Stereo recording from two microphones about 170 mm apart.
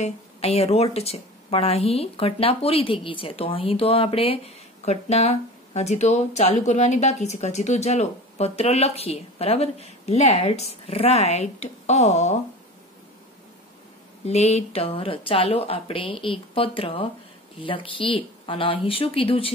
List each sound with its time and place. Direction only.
0.0 s speech: 35° left (ahead or behind)
14.2 s speech: 40° left (ahead or behind)